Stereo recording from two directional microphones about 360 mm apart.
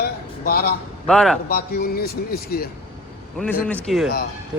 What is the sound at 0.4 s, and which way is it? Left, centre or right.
Speech, left.